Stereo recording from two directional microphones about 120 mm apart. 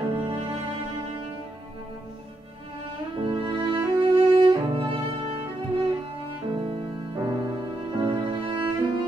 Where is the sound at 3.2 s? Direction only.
45° right (ahead or behind).